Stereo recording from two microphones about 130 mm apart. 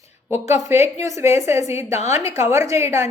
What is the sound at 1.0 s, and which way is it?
A woman's voice, 25° right (ahead or behind).